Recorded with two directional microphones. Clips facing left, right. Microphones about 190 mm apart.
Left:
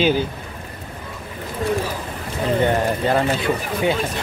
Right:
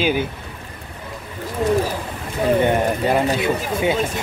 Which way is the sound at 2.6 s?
15° right (ahead or behind).